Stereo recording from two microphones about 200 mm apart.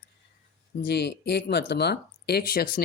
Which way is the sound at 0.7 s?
55° left (ahead or behind).